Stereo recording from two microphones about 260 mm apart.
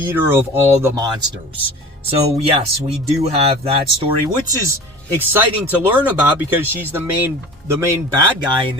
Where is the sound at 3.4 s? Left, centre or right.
Right.